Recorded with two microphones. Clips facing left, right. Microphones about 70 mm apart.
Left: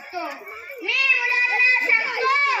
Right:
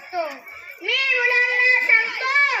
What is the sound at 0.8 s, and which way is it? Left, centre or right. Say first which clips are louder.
Child singing: right 2 dB; right.